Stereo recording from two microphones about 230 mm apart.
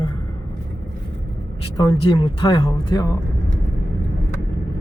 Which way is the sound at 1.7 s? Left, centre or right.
Left.